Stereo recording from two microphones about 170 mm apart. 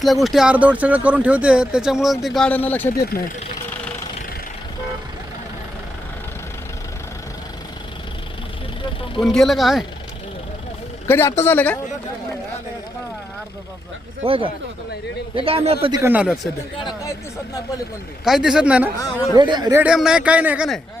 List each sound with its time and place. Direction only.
0.0 s speech: centre (ahead or behind)
9.2 s speech: centre (ahead or behind)
11.0 s a man's voice: 15° left (ahead or behind)
14.3 s a man's voice: 30° right (ahead or behind)
15.9 s speech: 15° right (ahead or behind)
18.3 s speech: 5° right (ahead or behind)
19.3 s speech: 25° right (ahead or behind)
19.7 s speech: 5° right (ahead or behind)